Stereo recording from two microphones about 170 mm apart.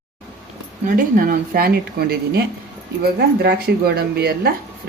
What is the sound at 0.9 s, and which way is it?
Speech, 55° right (ahead or behind).